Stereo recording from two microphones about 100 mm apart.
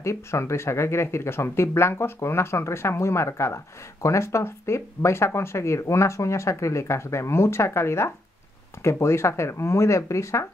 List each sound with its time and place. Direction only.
0.0 s speech: 30° left (ahead or behind)